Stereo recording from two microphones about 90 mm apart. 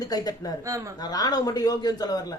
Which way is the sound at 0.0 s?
45° left (ahead or behind).